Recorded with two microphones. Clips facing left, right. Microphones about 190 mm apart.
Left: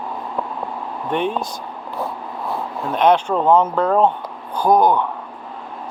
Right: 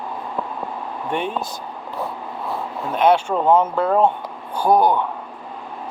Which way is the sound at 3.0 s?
10° right (ahead or behind).